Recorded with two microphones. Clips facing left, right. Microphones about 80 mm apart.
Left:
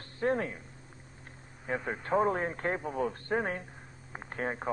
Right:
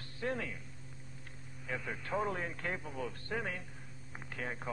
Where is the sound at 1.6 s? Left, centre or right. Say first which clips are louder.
Left 7 dB; left.